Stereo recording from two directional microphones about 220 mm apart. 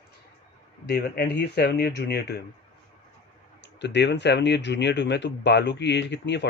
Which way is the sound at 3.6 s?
50° left (ahead or behind).